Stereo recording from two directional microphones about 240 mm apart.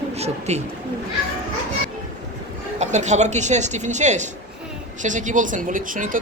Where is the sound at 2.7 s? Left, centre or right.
Right.